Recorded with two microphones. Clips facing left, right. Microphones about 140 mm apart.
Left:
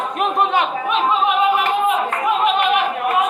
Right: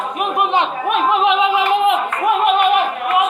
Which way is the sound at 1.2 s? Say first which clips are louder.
Right 2 dB; 85° right.